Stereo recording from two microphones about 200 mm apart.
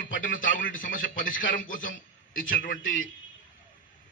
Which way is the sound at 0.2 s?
40° left (ahead or behind).